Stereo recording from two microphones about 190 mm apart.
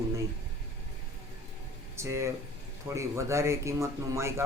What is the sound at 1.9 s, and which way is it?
Speech, 15° right (ahead or behind).